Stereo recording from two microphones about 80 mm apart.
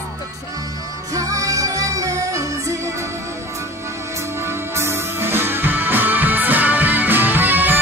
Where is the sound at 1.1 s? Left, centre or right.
Right.